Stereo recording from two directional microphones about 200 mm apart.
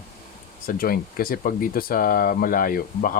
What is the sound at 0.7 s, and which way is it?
Speech, 45° left (ahead or behind).